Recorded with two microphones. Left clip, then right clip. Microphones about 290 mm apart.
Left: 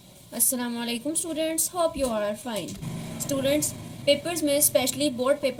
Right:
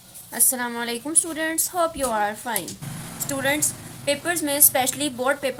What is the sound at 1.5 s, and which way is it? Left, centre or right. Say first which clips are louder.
Speech: right 2 dB; centre.